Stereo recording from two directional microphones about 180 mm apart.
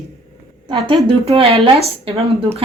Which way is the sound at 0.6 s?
30° right (ahead or behind).